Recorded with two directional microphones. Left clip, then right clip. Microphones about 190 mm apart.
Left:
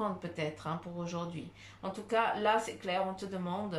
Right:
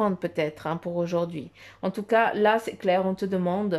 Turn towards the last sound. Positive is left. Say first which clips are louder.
# right 11 dB
turn(degrees=-45)  # may be behind; listen again after turning